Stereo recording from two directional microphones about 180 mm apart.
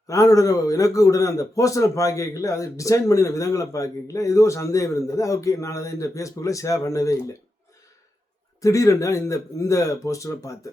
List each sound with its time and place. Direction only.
0.1 s a man's voice: 20° left (ahead or behind)
8.6 s a man's voice: 15° left (ahead or behind)